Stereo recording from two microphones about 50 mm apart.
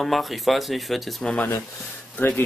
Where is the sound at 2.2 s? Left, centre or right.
Left.